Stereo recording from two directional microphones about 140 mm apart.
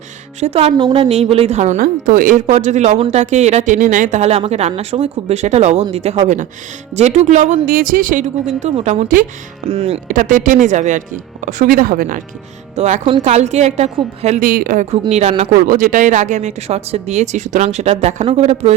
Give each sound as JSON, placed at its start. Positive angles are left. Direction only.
{"t": 0.3, "sound": "speech", "side_deg": -50}
{"t": 0.8, "sound": "a woman's voice", "side_deg": -30}
{"t": 1.0, "sound": "speech", "side_deg": -45}
{"t": 8.8, "sound": "speech", "side_deg": -55}
{"t": 9.6, "sound": "speech", "side_deg": -45}
{"t": 10.1, "sound": "speech", "side_deg": -70}
{"t": 12.7, "sound": "speech", "side_deg": -55}
{"t": 14.4, "sound": "speech", "side_deg": -90}
{"t": 15.1, "sound": "speech", "side_deg": -50}
{"t": 15.6, "sound": "speech", "side_deg": -75}